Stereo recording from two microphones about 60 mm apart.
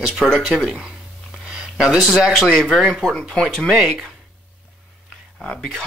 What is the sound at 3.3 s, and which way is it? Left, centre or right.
Speech, centre.